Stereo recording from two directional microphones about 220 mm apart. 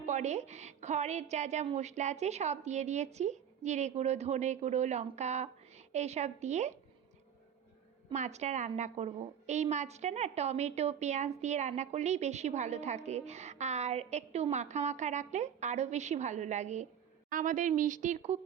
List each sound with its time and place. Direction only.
0.0 s a woman's voice: 30° right (ahead or behind)
8.1 s a woman's voice: 30° right (ahead or behind)